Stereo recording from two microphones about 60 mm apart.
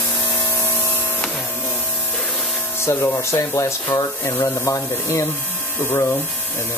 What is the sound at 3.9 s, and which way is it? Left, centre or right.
Speech, left.